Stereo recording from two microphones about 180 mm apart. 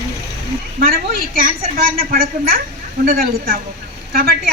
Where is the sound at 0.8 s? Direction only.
55° right (ahead or behind).